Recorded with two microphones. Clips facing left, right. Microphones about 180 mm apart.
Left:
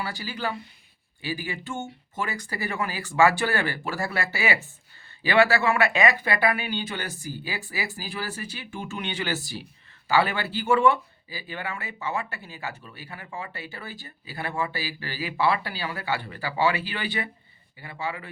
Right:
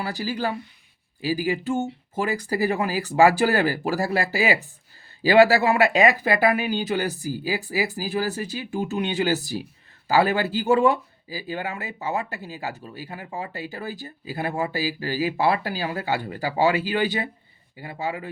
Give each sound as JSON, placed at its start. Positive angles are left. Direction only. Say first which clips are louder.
{"t": 0.0, "sound": "speech", "louder": "right 5 dB", "side_deg": -40}